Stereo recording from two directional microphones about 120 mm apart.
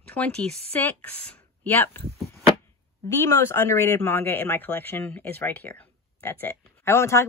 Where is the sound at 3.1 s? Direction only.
20° left (ahead or behind).